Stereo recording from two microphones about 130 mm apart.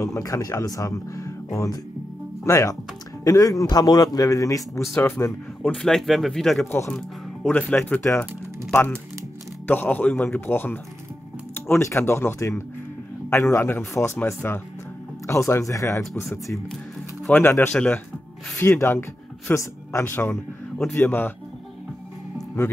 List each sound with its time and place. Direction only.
0.0 s speech: 25° left (ahead or behind)
5.8 s speech: 5° left (ahead or behind)
11.8 s speech: 20° left (ahead or behind)
16.4 s speech: centre (ahead or behind)
17.3 s speech: 15° left (ahead or behind)
18.8 s a man's voice: 20° left (ahead or behind)